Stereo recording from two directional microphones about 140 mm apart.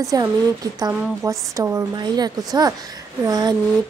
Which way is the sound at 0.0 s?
25° right (ahead or behind).